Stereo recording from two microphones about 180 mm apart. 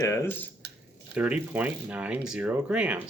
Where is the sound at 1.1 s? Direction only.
5° right (ahead or behind).